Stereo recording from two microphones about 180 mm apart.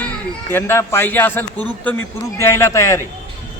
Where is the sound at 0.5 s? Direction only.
15° left (ahead or behind).